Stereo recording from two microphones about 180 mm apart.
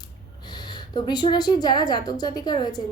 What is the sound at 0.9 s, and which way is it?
A woman's voice, 25° left (ahead or behind).